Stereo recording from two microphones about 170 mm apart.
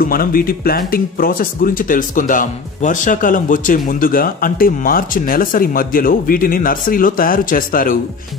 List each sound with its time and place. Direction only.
0.0 s speech: 60° left (ahead or behind)